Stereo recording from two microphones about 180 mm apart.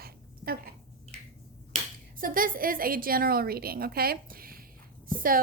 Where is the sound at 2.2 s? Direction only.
50° right (ahead or behind).